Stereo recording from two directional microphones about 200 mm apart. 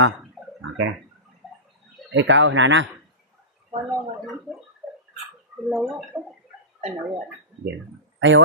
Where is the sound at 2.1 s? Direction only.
65° right (ahead or behind).